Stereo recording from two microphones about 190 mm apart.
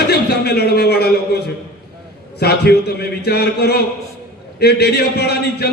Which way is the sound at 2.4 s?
55° left (ahead or behind).